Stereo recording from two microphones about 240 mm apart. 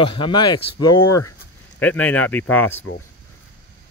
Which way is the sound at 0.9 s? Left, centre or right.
Left.